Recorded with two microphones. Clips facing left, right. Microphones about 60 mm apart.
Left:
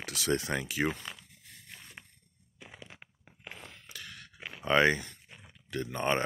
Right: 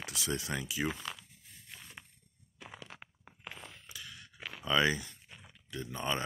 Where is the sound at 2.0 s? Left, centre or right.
Centre.